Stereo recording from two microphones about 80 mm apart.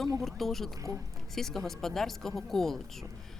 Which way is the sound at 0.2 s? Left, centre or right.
Centre.